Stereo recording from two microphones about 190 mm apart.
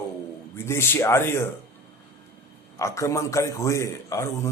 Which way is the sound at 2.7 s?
15° left (ahead or behind).